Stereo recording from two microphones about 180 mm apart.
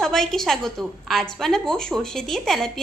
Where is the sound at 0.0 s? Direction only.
Centre (ahead or behind).